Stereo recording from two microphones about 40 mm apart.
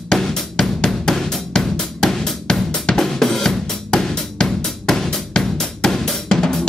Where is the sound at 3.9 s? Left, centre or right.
Left.